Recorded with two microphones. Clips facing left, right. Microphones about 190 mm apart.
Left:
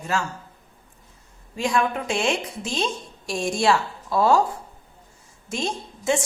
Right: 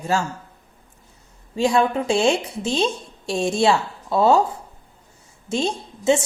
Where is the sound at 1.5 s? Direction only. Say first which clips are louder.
Right 5 dB; 30° right (ahead or behind).